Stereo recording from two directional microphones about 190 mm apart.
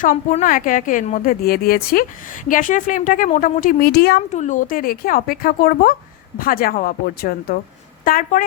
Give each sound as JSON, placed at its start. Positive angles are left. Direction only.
{"t": 0.0, "sound": "a woman's voice", "side_deg": 40}
{"t": 4.3, "sound": "a woman's voice", "side_deg": 40}